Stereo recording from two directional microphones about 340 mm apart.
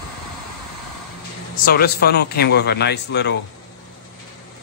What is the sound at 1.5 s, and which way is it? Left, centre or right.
Speech, left.